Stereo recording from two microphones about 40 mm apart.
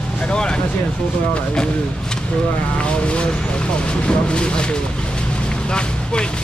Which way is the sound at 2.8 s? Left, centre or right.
Left.